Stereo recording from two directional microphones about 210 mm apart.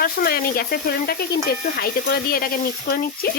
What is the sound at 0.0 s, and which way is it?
Speech, 45° left (ahead or behind).